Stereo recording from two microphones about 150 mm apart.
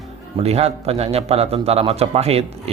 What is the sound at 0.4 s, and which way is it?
A man's voice, 45° right (ahead or behind).